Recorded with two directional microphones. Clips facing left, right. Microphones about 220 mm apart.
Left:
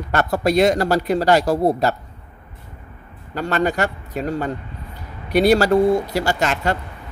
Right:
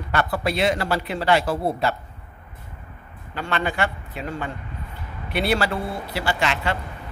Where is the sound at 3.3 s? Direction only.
40° left (ahead or behind).